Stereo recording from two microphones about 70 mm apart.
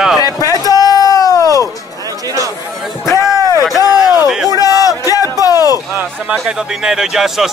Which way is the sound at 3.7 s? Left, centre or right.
Left.